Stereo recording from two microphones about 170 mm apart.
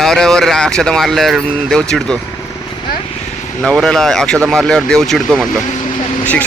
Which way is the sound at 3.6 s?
5° left (ahead or behind).